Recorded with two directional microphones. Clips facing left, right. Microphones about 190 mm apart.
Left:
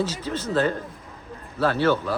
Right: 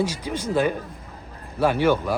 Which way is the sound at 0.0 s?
15° right (ahead or behind).